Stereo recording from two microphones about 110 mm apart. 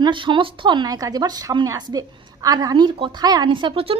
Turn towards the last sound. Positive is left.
turn(degrees=-50)  # may be behind; listen again after turning